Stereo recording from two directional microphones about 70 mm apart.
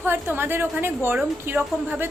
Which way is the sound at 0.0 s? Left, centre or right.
Right.